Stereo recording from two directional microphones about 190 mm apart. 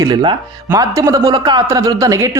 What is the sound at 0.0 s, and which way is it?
Speech, 25° right (ahead or behind).